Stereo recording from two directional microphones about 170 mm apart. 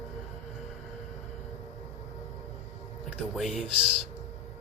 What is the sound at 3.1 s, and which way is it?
Speech, centre (ahead or behind).